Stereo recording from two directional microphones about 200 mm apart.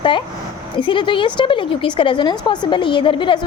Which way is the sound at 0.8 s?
25° left (ahead or behind).